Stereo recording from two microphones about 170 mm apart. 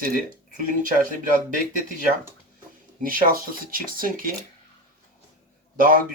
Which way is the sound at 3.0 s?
55° right (ahead or behind).